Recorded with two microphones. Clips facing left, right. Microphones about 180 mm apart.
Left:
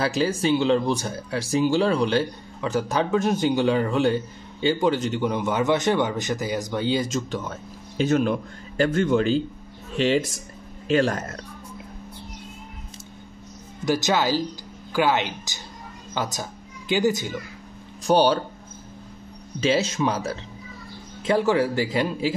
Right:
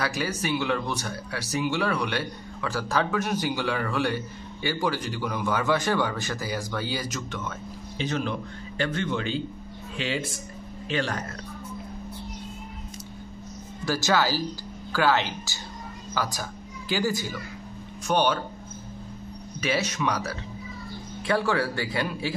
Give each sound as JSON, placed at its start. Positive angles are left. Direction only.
{"t": 0.0, "sound": "speech", "side_deg": 25}
{"t": 8.0, "sound": "a man's voice", "side_deg": 50}
{"t": 13.8, "sound": "a woman's voice", "side_deg": 20}
{"t": 18.0, "sound": "speech", "side_deg": 35}
{"t": 19.6, "sound": "speech", "side_deg": 25}